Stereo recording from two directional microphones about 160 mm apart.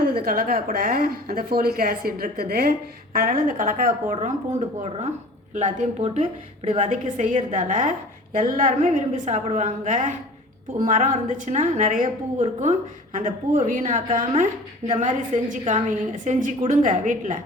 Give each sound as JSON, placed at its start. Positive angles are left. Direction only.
{"t": 0.0, "sound": "a woman's voice", "side_deg": -70}